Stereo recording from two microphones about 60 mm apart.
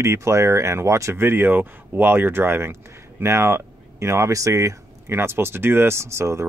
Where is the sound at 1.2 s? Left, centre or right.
Right.